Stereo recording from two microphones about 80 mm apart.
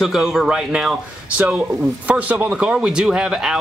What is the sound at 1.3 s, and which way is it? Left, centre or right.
A man's voice, centre.